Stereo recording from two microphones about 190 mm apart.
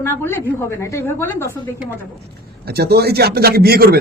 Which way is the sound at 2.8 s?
60° right (ahead or behind).